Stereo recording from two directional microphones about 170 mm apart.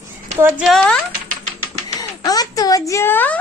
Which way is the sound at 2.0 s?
25° left (ahead or behind).